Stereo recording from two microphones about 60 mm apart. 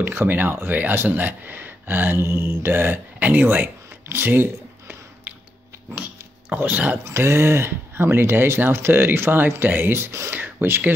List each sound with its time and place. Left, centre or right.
0.0 s speech: right
6.5 s speech: right
7.1 s speech: right